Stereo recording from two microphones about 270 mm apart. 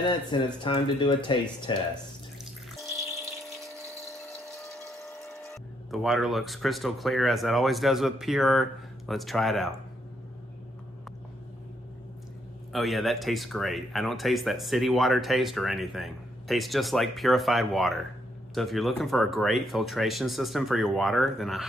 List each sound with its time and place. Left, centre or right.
0.0 s speech: centre
4.9 s speech: centre
12.7 s speech: centre